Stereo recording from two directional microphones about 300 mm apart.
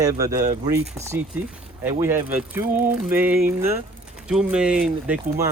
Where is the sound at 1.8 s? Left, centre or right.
Centre.